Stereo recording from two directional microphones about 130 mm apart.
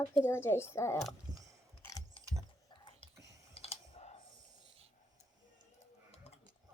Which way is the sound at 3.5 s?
50° left (ahead or behind).